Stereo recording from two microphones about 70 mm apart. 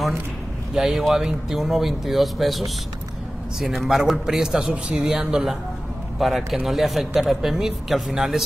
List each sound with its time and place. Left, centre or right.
0.7 s speech: centre